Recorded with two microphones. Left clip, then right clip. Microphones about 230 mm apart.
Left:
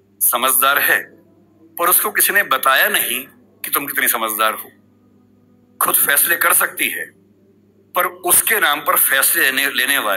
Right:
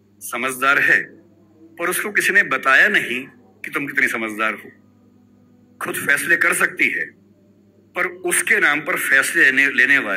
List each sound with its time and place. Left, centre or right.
0.2 s a man's voice: centre
5.8 s a man's voice: centre